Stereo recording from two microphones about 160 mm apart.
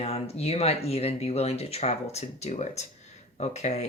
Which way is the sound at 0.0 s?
40° left (ahead or behind).